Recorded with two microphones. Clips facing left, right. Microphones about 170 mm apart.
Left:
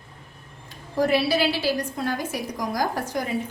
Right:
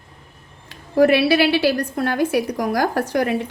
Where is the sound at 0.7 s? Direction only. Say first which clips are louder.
Right 7 dB; 70° right (ahead or behind).